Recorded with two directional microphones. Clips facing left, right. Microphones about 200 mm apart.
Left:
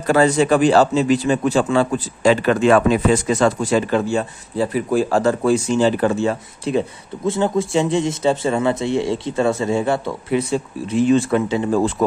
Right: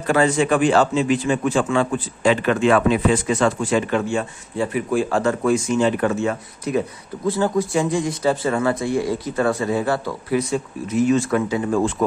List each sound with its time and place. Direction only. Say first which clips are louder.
0.0 s a man's voice: left 3 dB; 40° left (ahead or behind)